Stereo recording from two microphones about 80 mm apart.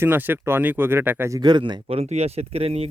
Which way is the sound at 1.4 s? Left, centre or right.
Right.